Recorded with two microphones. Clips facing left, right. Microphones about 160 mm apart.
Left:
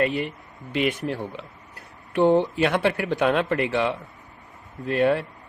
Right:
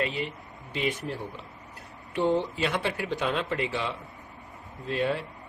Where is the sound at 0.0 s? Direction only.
55° left (ahead or behind).